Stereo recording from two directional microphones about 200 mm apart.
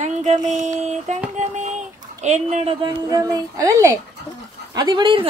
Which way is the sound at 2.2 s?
35° right (ahead or behind).